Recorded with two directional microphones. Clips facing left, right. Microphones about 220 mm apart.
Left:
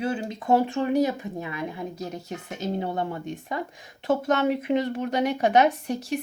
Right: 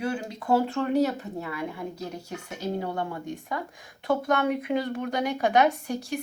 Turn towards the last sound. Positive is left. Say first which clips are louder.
# left 2 dB
turn(degrees=20)  # may be behind; listen again after turning